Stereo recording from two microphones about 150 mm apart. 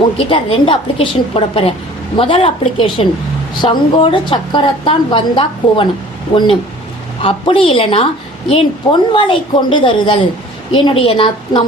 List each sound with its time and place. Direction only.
0.2 s a woman's voice: 35° left (ahead or behind)
7.2 s a woman's voice: 35° left (ahead or behind)